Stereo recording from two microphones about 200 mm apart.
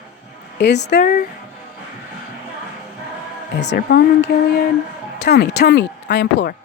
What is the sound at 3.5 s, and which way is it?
Speech, 55° left (ahead or behind).